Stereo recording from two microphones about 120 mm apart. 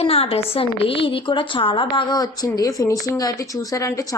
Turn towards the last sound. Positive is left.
turn(degrees=30)  # may be behind; listen again after turning